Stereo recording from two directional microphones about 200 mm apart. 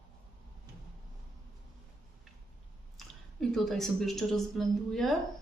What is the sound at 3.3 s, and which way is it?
A woman's voice, centre (ahead or behind).